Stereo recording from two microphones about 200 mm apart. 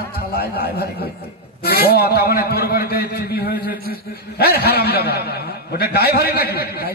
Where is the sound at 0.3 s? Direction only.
50° left (ahead or behind).